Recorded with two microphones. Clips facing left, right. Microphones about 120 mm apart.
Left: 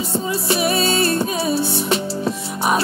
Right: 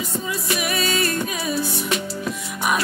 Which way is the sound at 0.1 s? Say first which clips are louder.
Left 7 dB; 30° left (ahead or behind).